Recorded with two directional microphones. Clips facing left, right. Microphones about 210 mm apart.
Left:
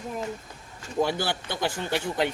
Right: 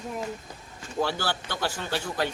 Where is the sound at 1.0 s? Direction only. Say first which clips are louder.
Even; 15° left (ahead or behind).